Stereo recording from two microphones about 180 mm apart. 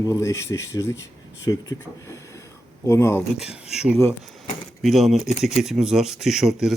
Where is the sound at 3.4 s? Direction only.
5° right (ahead or behind).